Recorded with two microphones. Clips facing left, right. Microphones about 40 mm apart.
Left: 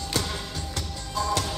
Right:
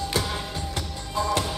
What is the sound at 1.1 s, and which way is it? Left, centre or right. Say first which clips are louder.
Music: right 2 dB; centre.